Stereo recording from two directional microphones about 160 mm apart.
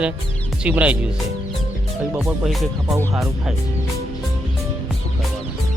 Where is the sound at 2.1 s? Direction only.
Centre (ahead or behind).